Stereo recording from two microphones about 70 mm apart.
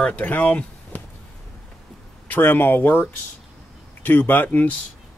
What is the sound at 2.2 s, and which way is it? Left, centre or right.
Speech, left.